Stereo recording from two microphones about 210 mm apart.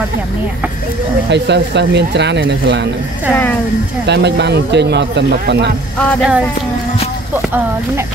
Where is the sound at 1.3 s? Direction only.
55° right (ahead or behind).